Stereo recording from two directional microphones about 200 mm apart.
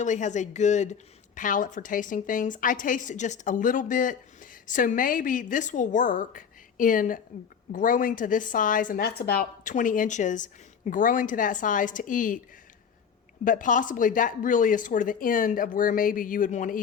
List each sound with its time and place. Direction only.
0.0 s a woman's voice: 35° left (ahead or behind)
13.4 s a woman's voice: 40° left (ahead or behind)